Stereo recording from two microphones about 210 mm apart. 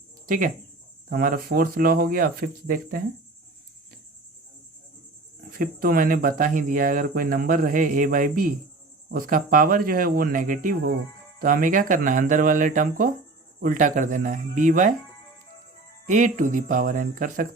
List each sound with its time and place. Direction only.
0.3 s speech: 40° right (ahead or behind)
5.5 s speech: 40° right (ahead or behind)
16.0 s speech: 35° right (ahead or behind)